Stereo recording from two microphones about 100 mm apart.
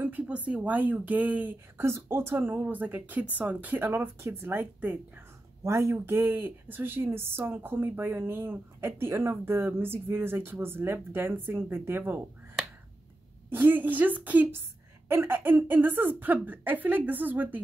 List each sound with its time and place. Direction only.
0.0 s speech: 15° right (ahead or behind)
13.5 s speech: 20° right (ahead or behind)